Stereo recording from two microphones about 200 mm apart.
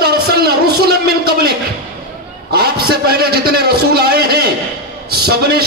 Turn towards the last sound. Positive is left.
turn(degrees=-50)  # may be behind; listen again after turning